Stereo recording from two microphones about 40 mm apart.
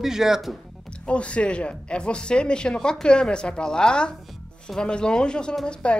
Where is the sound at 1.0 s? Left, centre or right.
Left.